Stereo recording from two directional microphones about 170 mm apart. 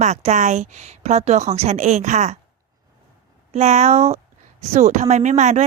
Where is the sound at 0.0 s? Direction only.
40° right (ahead or behind).